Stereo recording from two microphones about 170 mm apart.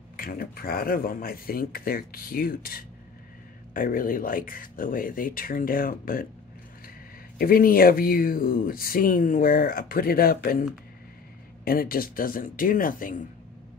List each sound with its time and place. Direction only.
0.2 s speech: 60° left (ahead or behind)
7.3 s speech: 60° left (ahead or behind)
11.6 s speech: 60° left (ahead or behind)